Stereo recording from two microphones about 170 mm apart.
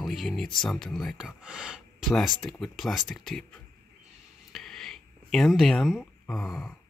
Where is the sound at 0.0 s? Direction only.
Centre (ahead or behind).